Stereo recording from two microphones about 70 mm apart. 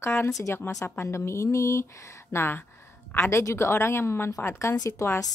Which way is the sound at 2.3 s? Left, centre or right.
Left.